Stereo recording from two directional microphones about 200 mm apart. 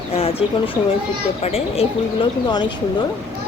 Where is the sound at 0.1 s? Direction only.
30° left (ahead or behind).